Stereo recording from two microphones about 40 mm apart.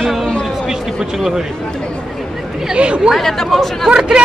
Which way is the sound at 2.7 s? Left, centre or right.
Right.